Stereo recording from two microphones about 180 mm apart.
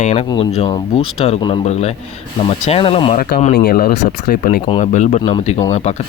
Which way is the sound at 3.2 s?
60° left (ahead or behind).